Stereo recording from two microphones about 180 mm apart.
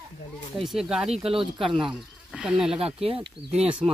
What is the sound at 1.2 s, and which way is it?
Speech, 30° right (ahead or behind).